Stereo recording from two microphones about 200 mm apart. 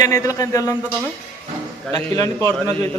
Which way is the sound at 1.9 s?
15° left (ahead or behind).